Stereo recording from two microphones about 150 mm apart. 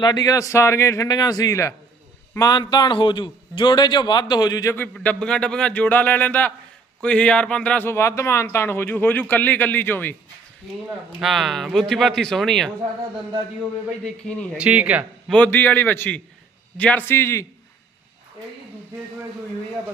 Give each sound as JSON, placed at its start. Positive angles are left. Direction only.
{"t": 0.0, "sound": "a man's voice", "side_deg": 25}
{"t": 4.9, "sound": "a man's voice", "side_deg": 5}
{"t": 11.2, "sound": "speech", "side_deg": 0}
{"t": 14.0, "sound": "speech", "side_deg": 5}
{"t": 14.6, "sound": "speech", "side_deg": -10}
{"t": 15.3, "sound": "a man's voice", "side_deg": 10}